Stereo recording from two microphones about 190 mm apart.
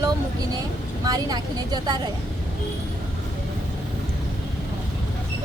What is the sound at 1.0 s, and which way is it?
Speech, 20° right (ahead or behind).